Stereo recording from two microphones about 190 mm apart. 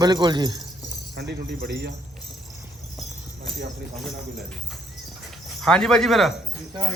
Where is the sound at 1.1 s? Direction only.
60° right (ahead or behind).